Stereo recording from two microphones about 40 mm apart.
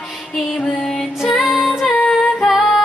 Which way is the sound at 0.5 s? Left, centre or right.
Centre.